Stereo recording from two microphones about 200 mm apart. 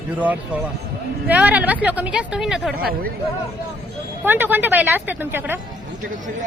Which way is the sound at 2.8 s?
45° right (ahead or behind).